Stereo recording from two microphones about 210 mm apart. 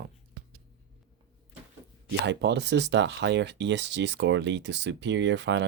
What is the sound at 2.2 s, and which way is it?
Speech, 55° right (ahead or behind).